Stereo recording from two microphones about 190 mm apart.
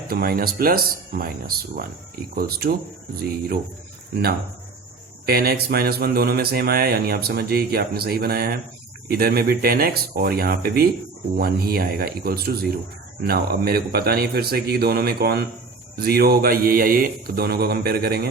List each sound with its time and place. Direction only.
0.1 s speech: 50° right (ahead or behind)
5.2 s speech: 55° right (ahead or behind)